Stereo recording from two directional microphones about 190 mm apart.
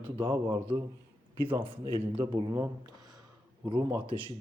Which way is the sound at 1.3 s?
30° right (ahead or behind).